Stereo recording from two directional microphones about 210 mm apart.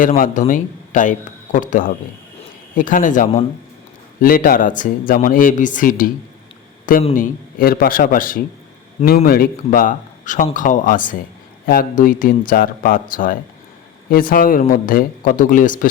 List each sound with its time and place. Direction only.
0.0 s a man's voice: 40° left (ahead or behind)